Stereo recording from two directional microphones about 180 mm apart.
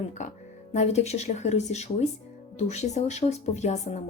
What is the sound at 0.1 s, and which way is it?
Speech, 40° left (ahead or behind).